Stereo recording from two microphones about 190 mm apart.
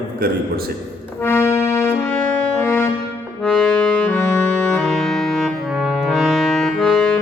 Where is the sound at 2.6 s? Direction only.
10° left (ahead or behind).